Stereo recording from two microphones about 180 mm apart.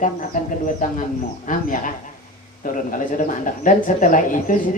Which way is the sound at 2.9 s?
45° left (ahead or behind).